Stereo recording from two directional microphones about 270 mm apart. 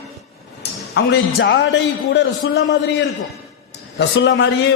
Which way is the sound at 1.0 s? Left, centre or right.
Left.